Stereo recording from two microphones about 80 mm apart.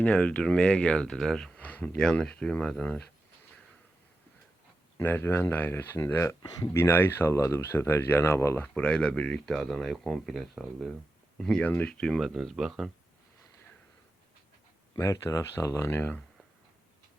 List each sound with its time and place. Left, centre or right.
0.0 s speech: centre
2.0 s speech: centre
4.9 s speech: left
8.6 s speech: centre
11.6 s speech: left
11.9 s speech: centre
12.3 s speech: centre
14.9 s speech: left